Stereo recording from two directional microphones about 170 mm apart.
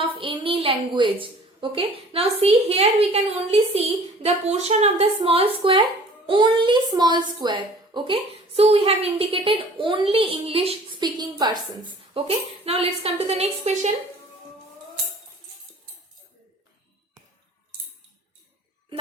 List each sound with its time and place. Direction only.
0.0 s a woman's voice: 30° right (ahead or behind)